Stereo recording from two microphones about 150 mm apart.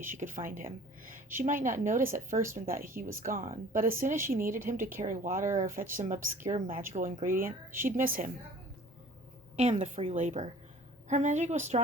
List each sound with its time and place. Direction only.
0.0 s a woman's voice: 60° right (ahead or behind)
9.6 s a woman's voice: 50° right (ahead or behind)